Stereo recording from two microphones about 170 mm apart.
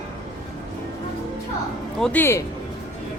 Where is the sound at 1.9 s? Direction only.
5° left (ahead or behind).